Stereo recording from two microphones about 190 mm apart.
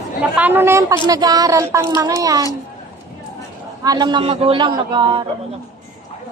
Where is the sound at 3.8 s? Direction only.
25° right (ahead or behind).